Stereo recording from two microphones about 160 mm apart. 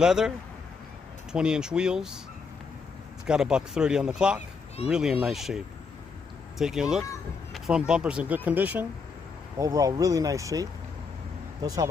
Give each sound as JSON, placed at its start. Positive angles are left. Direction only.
{"t": 0.0, "sound": "speech", "side_deg": -5}
{"t": 1.3, "sound": "speech", "side_deg": -5}
{"t": 3.3, "sound": "speech", "side_deg": -5}
{"t": 6.6, "sound": "speech", "side_deg": -5}
{"t": 9.6, "sound": "speech", "side_deg": -20}